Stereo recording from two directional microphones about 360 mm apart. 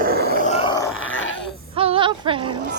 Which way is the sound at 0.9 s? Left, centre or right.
Left.